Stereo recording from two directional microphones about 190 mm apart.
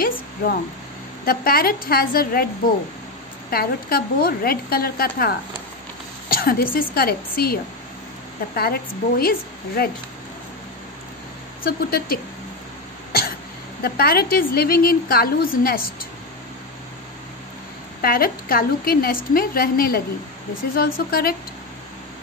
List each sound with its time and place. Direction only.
1.2 s a woman's voice: 50° left (ahead or behind)
8.5 s a woman's voice: 55° left (ahead or behind)
11.6 s a woman's voice: 50° left (ahead or behind)
13.8 s a woman's voice: 50° left (ahead or behind)
18.0 s a woman's voice: 50° left (ahead or behind)